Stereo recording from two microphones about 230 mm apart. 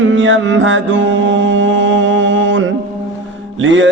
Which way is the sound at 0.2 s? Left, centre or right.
Right.